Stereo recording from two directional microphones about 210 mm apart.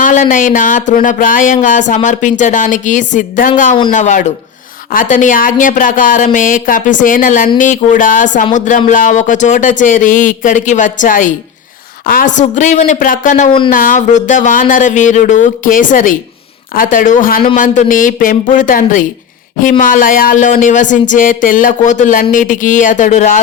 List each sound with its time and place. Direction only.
0.0 s music: 40° left (ahead or behind)